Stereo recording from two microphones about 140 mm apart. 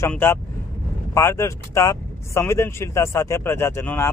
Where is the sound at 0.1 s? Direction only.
15° left (ahead or behind).